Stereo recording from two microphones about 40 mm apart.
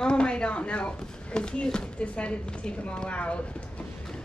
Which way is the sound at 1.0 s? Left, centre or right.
Left.